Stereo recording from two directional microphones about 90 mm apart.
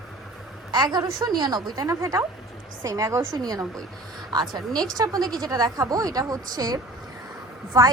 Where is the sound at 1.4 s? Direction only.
50° right (ahead or behind).